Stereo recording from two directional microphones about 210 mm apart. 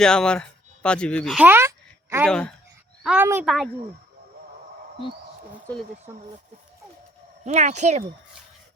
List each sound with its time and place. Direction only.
0.0 s speech: 5° left (ahead or behind); by 2.2 s 10° right (ahead or behind)
2.2 s speech: 5° left (ahead or behind)
3.0 s speech: 5° right (ahead or behind)
7.4 s speech: 35° right (ahead or behind)